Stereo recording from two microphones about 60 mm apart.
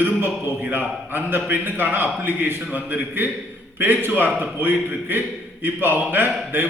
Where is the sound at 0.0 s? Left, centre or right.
Right.